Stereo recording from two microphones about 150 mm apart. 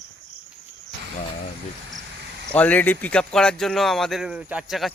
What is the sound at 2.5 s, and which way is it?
Speech, 10° left (ahead or behind).